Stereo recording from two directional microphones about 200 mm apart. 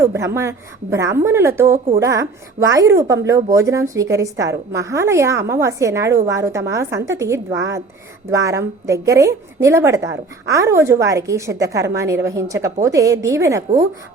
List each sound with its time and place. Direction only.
0.0 s a woman's voice: 15° right (ahead or behind)